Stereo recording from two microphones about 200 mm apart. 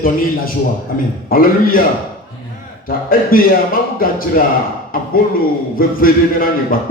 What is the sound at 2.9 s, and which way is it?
Speech, 45° left (ahead or behind).